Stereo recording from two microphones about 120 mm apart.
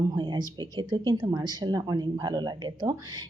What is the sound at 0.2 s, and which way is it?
Speech, 40° right (ahead or behind).